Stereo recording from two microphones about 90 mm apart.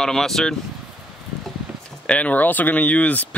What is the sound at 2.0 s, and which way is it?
Speech, 15° left (ahead or behind).